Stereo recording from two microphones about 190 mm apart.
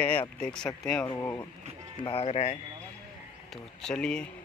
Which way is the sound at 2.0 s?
30° left (ahead or behind).